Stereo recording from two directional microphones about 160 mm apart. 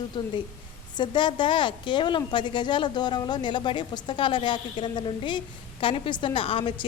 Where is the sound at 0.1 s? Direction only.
30° left (ahead or behind).